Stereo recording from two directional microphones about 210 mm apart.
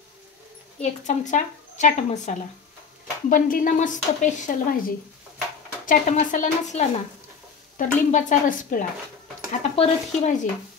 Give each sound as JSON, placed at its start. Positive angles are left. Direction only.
{"t": 0.7, "sound": "speech", "side_deg": 35}